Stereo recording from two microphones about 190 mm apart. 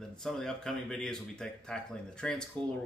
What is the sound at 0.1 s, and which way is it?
Speech, centre (ahead or behind).